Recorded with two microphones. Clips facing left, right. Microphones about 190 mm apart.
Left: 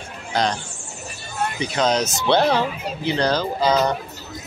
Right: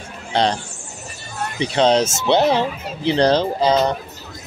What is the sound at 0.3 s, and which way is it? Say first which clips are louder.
Speech: right 3 dB; 30° right (ahead or behind).